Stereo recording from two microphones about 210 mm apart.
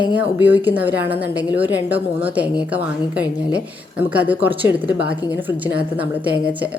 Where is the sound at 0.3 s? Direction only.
10° right (ahead or behind).